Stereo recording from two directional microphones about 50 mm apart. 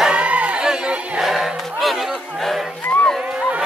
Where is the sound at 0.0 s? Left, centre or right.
Right.